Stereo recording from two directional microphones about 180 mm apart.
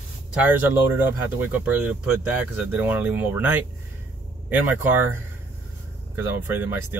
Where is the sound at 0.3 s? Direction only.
10° right (ahead or behind).